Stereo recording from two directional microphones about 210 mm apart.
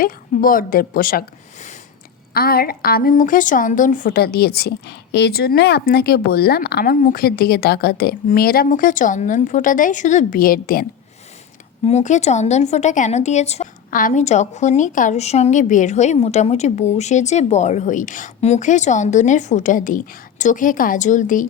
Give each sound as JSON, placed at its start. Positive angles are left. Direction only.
{"t": 0.0, "sound": "a woman's voice", "side_deg": 40}
{"t": 2.3, "sound": "a woman's voice", "side_deg": 45}
{"t": 11.9, "sound": "speech", "side_deg": 35}